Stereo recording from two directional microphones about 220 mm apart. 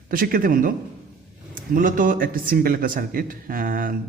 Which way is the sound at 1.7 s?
35° right (ahead or behind).